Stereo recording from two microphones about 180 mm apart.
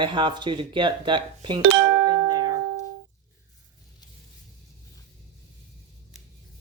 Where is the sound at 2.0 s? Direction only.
20° right (ahead or behind).